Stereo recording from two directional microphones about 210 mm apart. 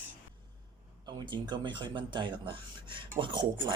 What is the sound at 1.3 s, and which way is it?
Speech, 20° right (ahead or behind).